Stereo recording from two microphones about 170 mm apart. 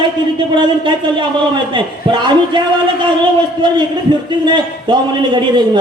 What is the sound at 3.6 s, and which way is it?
A man's voice, 25° right (ahead or behind).